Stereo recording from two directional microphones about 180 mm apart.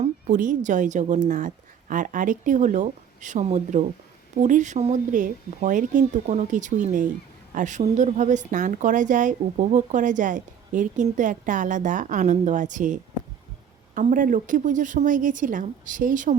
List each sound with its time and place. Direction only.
0.0 s a woman's voice: 45° right (ahead or behind)